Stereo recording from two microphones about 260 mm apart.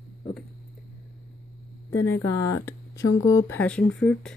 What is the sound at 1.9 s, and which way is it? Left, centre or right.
Speech, left.